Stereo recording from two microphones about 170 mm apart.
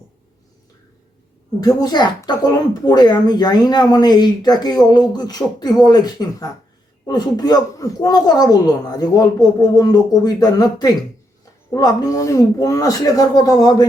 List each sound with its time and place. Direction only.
1.6 s speech: 25° left (ahead or behind)